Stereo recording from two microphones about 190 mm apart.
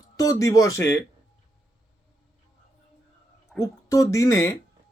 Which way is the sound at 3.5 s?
15° left (ahead or behind).